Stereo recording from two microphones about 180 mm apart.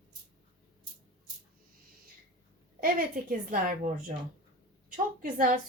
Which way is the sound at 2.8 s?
50° right (ahead or behind).